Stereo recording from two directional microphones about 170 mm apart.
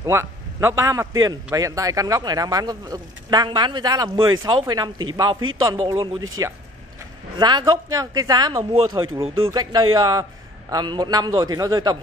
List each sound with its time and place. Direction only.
0.0 s a man's voice: 15° right (ahead or behind)